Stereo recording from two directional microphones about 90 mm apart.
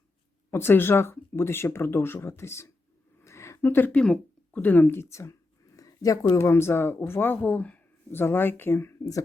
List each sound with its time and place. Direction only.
0.5 s speech: 25° left (ahead or behind)
3.2 s a sound: 30° left (ahead or behind)
3.9 s speech: 10° left (ahead or behind); by 6.1 s 40° left (ahead or behind)
6.3 s speech: 30° left (ahead or behind)